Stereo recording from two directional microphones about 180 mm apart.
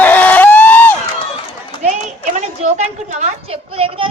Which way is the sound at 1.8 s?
40° right (ahead or behind).